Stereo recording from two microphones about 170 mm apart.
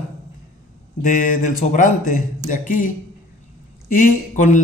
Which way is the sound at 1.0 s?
50° left (ahead or behind).